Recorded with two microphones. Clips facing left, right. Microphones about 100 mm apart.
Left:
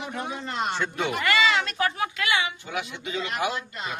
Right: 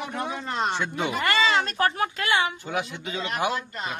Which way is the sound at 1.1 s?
35° right (ahead or behind).